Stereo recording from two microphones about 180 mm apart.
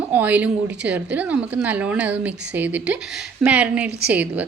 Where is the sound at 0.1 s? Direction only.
10° right (ahead or behind).